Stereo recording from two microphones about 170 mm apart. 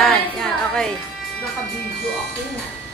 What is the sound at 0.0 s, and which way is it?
Music, 5° left (ahead or behind).